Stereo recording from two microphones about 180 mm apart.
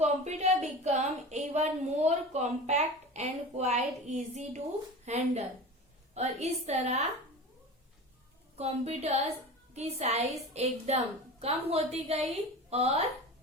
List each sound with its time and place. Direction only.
0.0 s a woman's voice: 40° right (ahead or behind)
8.5 s a woman's voice: 35° right (ahead or behind)